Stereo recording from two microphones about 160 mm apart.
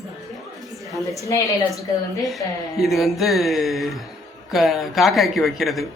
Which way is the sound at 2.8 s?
Centre (ahead or behind).